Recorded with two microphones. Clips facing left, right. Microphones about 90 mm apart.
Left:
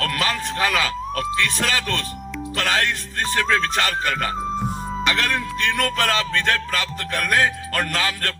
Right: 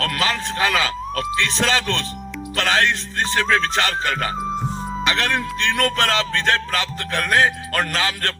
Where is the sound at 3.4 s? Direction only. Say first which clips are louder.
Right 1 dB; 30° right (ahead or behind).